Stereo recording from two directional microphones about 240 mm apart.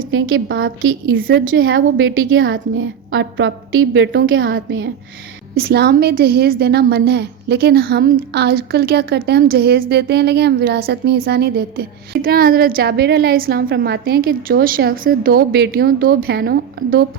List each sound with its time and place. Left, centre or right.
0.1 s a woman's voice: right
1.2 s a woman's voice: right
1.5 s a woman's voice: right
4.4 s a woman's voice: right